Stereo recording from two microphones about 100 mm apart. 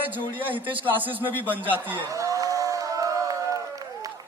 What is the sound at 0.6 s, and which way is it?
Speech, 60° right (ahead or behind).